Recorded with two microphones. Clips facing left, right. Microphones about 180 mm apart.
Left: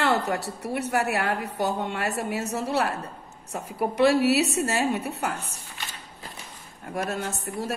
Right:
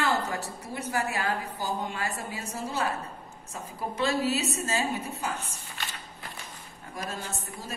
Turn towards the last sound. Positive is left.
turn(degrees=70)  # may be behind; listen again after turning